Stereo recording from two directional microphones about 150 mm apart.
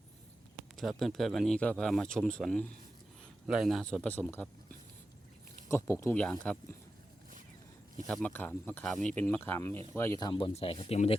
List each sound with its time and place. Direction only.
0.8 s speech: centre (ahead or behind)
5.6 s speech: 20° left (ahead or behind)
6.5 s speech: 5° left (ahead or behind)
8.0 s speech: 10° left (ahead or behind)
10.2 s speech: 35° left (ahead or behind)